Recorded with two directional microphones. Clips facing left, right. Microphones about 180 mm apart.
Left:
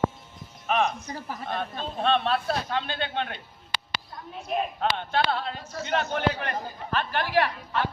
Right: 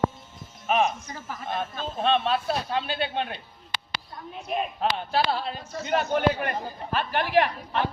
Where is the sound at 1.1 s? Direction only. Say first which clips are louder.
Left 2 dB; 35° left (ahead or behind).